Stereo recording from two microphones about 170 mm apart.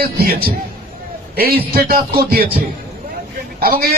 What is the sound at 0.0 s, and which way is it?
A man's voice, 65° right (ahead or behind).